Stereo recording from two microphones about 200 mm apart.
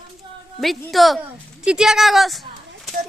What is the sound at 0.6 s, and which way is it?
Speech, centre (ahead or behind).